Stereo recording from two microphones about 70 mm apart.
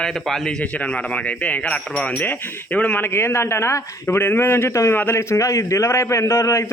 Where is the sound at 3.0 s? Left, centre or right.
Left.